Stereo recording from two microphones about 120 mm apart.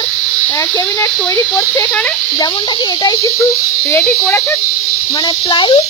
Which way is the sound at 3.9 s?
15° left (ahead or behind).